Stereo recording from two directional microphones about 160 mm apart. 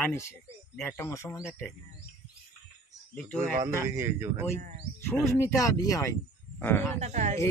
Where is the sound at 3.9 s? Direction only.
15° right (ahead or behind).